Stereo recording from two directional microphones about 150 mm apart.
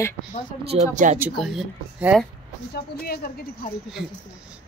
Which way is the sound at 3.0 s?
90° left.